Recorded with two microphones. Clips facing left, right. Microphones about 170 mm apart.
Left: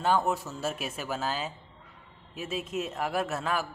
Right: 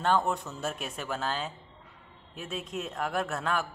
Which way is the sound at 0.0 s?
5° left (ahead or behind).